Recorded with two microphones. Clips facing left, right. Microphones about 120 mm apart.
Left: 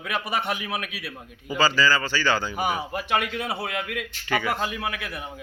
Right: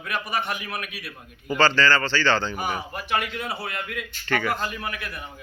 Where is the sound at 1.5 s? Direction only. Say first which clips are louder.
Right 2 dB; 5° left (ahead or behind).